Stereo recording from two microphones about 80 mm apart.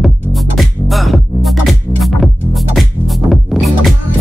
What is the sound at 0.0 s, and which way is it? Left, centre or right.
Music, centre.